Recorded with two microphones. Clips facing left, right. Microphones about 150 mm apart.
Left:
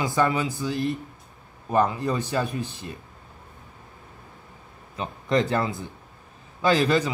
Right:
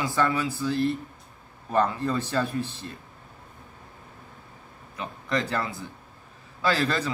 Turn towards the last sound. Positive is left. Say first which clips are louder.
# left 5 dB
turn(degrees=15)  # may be behind; listen again after turning